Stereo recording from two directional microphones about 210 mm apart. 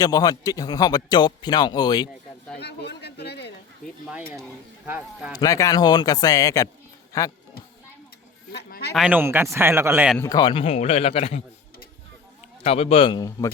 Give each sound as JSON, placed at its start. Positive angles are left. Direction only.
{"t": 0.0, "sound": "speech", "side_deg": 20}
{"t": 2.6, "sound": "a sound", "side_deg": 50}
{"t": 5.3, "sound": "speech", "side_deg": 15}
{"t": 8.5, "sound": "a sound", "side_deg": 50}
{"t": 9.0, "sound": "speech", "side_deg": -10}
{"t": 10.2, "sound": "speech", "side_deg": 15}
{"t": 12.6, "sound": "speech", "side_deg": 30}